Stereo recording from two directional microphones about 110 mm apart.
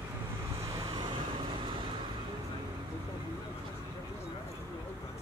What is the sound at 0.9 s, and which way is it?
Vehicle, 40° right (ahead or behind).